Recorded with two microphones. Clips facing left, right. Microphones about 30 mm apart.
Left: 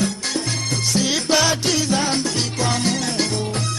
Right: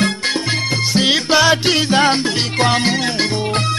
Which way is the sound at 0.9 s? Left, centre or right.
Right.